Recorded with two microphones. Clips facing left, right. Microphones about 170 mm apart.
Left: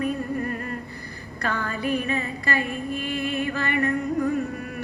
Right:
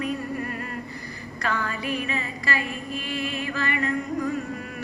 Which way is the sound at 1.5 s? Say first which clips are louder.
Left 2 dB; 50° left (ahead or behind).